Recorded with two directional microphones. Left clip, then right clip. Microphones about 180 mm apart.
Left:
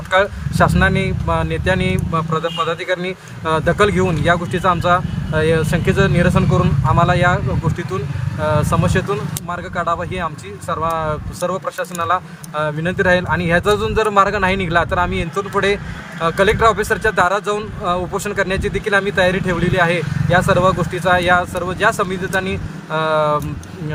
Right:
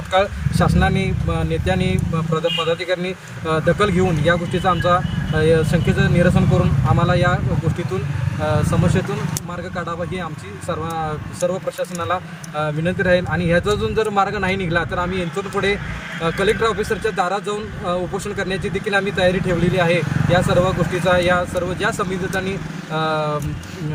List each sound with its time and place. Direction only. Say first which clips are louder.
0.1 s speech: left 2 dB; 35° left (ahead or behind)
8.4 s speech: left 3 dB; 35° left (ahead or behind)
11.4 s speech: even; 35° left (ahead or behind)